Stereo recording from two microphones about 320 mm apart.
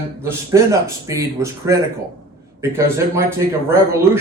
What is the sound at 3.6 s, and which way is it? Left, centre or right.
Speech, centre.